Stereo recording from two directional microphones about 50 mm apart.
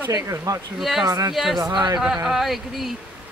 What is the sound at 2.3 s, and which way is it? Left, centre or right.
Speech, centre.